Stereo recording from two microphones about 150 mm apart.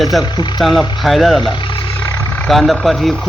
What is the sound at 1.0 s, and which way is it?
Speech, centre (ahead or behind).